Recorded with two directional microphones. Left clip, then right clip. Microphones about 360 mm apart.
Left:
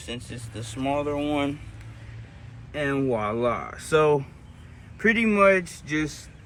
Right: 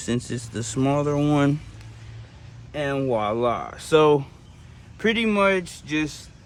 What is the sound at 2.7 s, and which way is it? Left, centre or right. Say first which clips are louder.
Speech: right 2 dB; right.